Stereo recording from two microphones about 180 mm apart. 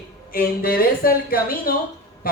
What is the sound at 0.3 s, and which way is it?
Speech, 55° left (ahead or behind).